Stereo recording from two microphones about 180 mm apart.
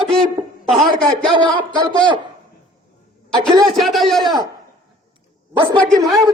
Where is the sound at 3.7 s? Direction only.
Centre (ahead or behind).